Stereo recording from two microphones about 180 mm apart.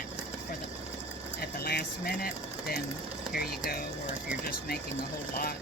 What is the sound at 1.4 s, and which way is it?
Speech, 60° left (ahead or behind).